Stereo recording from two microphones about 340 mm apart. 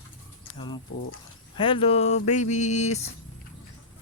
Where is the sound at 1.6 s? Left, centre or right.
Centre.